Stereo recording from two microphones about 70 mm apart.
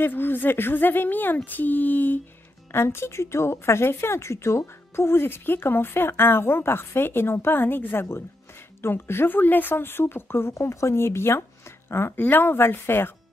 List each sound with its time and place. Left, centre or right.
0.0 s a woman's voice: left
2.7 s speech: left
12.2 s speech: left